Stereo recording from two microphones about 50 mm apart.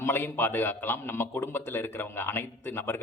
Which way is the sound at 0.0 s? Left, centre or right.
Left.